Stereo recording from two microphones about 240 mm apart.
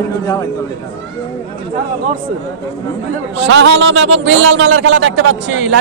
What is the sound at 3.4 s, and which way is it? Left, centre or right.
A man's voice, right.